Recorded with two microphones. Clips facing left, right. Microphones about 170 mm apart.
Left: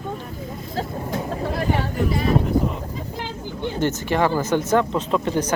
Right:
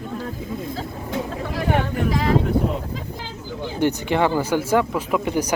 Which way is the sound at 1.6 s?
90° right.